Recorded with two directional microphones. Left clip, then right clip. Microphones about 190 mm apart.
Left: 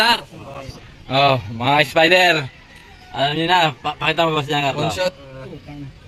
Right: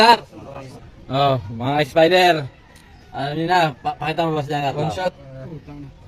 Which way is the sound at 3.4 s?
Centre (ahead or behind).